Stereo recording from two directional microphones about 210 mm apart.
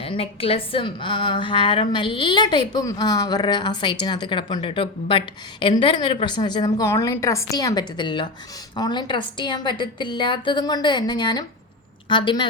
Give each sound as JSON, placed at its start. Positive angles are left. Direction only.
{"t": 0.0, "sound": "a woman's voice", "side_deg": 25}